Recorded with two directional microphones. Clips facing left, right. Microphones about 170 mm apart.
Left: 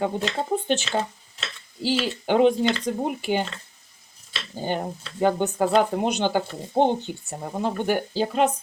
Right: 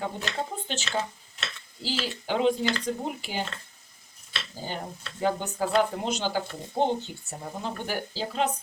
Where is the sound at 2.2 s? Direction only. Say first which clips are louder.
Left 6 dB; 60° left (ahead or behind).